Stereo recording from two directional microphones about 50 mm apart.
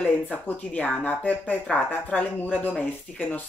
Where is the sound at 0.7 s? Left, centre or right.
Left.